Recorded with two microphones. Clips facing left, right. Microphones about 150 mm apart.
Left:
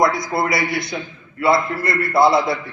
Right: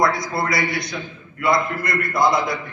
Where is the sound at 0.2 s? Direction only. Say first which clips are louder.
Left 2 dB; 25° left (ahead or behind).